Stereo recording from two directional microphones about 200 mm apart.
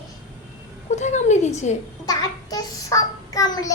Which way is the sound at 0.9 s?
35° left (ahead or behind).